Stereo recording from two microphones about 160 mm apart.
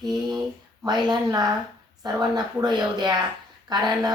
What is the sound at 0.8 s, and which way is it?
A woman's voice, 25° right (ahead or behind).